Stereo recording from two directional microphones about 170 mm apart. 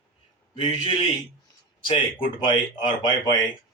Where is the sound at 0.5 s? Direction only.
35° left (ahead or behind).